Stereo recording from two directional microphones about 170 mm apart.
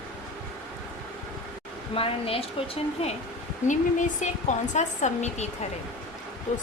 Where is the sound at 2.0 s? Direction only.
35° left (ahead or behind).